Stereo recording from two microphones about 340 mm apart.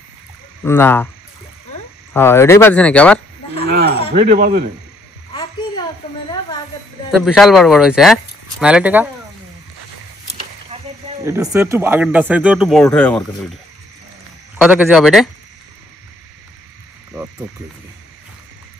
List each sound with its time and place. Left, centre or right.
0.7 s speech: centre
2.1 s speech: centre
3.6 s a sound: right
4.1 s speech: right
5.3 s a sound: centre
7.1 s speech: centre
10.7 s speech: centre
14.6 s speech: centre